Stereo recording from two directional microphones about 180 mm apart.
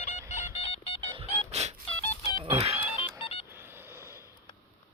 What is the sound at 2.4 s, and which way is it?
Music, 35° right (ahead or behind).